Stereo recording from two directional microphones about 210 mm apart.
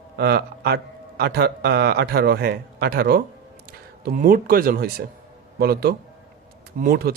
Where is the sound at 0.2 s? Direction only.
50° right (ahead or behind).